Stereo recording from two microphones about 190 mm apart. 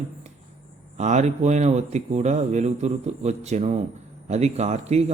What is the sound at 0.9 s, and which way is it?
Speech, 35° right (ahead or behind).